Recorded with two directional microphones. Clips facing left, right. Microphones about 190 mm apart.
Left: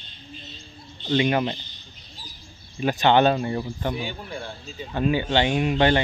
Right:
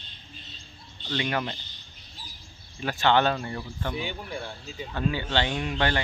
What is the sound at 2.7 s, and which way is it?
A man's voice, 20° left (ahead or behind).